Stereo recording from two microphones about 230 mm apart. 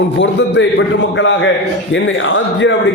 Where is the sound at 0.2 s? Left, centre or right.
Left.